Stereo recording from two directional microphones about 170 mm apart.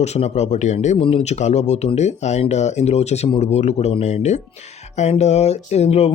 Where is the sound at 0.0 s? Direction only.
40° left (ahead or behind).